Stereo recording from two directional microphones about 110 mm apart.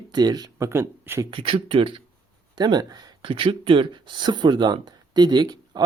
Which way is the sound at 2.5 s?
40° right (ahead or behind).